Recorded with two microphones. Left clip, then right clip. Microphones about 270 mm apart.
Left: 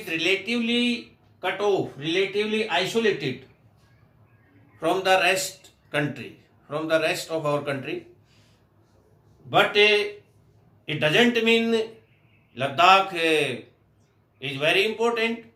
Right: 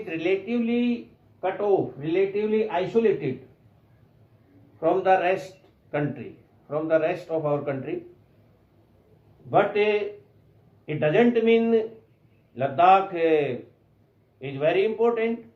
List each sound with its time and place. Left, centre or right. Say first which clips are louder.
0.0 s speech: left 2 dB; left
4.8 s speech: even; left
9.5 s speech: left 3 dB; left